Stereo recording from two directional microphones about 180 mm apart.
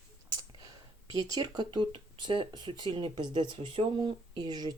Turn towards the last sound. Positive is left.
turn(degrees=-25)  # may be behind; listen again after turning